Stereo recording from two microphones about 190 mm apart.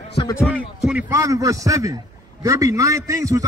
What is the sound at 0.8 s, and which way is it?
A man's voice, 10° right (ahead or behind).